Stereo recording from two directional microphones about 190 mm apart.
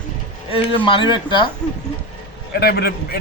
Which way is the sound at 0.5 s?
25° left (ahead or behind).